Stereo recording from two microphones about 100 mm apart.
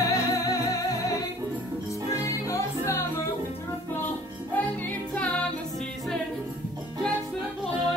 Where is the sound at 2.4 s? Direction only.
30° left (ahead or behind).